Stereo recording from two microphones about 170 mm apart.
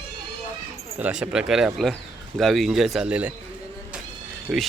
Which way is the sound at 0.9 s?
10° right (ahead or behind).